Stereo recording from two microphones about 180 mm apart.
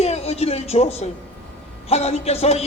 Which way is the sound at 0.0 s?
35° left (ahead or behind).